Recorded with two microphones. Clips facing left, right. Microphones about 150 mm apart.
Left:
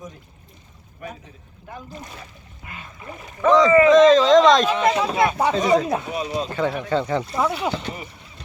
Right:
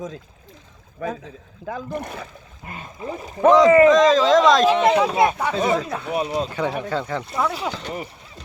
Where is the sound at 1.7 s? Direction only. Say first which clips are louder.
Right 7 dB; 60° right (ahead or behind).